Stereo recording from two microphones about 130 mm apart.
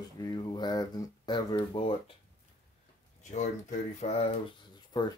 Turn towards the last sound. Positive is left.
turn(degrees=30)  # may be behind; listen again after turning